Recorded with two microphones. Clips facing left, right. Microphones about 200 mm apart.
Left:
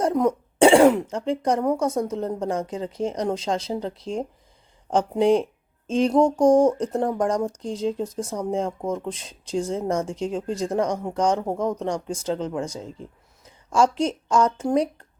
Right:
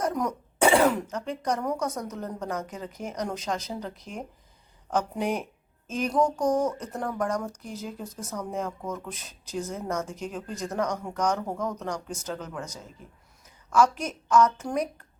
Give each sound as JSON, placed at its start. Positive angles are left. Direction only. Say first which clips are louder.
{"t": 0.0, "sound": "speech", "louder": "left 7 dB", "side_deg": 25}